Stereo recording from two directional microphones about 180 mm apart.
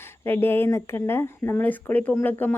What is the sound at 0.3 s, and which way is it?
Speech, 10° left (ahead or behind).